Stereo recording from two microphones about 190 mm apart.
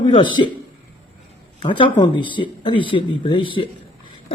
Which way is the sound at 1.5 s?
25° left (ahead or behind).